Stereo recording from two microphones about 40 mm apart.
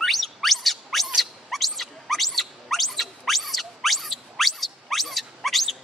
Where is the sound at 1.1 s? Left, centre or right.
Centre.